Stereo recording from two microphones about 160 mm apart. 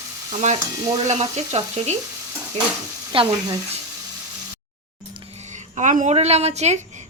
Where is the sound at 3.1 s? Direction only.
35° right (ahead or behind).